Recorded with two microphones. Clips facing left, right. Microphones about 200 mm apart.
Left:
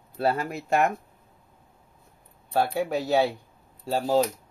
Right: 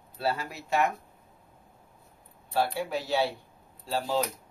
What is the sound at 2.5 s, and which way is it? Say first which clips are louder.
Speech: left 4 dB; 50° left (ahead or behind).